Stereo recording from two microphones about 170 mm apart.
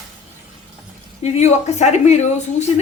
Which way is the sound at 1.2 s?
40° left (ahead or behind).